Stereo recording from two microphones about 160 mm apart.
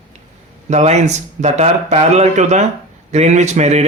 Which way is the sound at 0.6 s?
45° right (ahead or behind).